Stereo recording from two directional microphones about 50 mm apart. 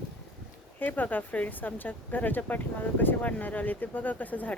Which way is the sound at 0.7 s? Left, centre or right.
Left.